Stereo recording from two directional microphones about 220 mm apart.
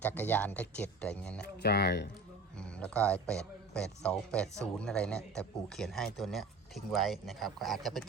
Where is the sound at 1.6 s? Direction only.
50° left (ahead or behind).